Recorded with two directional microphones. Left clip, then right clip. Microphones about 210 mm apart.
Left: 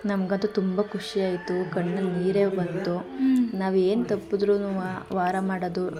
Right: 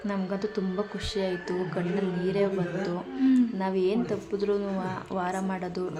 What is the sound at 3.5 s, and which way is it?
Speech, 20° left (ahead or behind).